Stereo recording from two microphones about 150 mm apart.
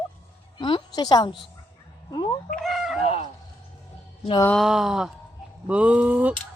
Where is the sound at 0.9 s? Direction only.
25° left (ahead or behind).